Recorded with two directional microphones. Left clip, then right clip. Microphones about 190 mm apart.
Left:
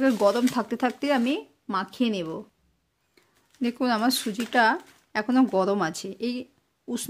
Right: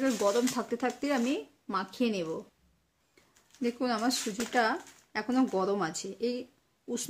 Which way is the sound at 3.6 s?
50° left (ahead or behind).